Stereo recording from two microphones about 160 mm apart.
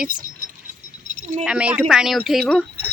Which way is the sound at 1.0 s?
50° right (ahead or behind).